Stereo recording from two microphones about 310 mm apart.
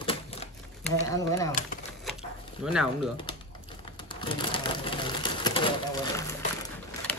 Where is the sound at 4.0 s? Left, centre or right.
Centre.